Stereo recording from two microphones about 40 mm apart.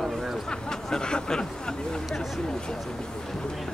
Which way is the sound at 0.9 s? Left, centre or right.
Centre.